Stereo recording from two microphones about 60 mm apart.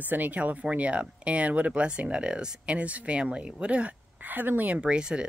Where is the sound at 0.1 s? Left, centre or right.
Right.